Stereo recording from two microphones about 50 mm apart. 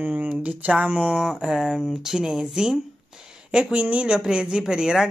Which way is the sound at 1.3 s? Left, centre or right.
Centre.